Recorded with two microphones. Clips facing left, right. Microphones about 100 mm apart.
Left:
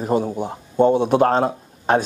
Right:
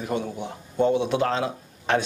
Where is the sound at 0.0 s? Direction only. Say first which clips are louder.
Left 7 dB; 40° left (ahead or behind).